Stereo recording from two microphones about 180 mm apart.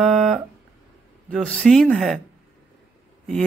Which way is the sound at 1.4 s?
5° left (ahead or behind).